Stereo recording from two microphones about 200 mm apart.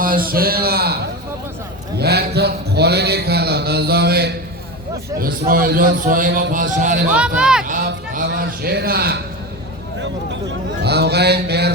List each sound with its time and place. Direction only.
0.0 s a man's voice: 45° right (ahead or behind)
2.0 s speech: 55° right (ahead or behind)
7.1 s speech: 5° right (ahead or behind)
7.7 s speech: 40° right (ahead or behind)
10.8 s a sound: 55° right (ahead or behind)